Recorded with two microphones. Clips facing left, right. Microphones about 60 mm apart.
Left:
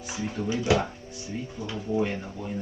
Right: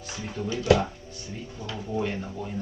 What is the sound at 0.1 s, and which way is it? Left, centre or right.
Speech, centre.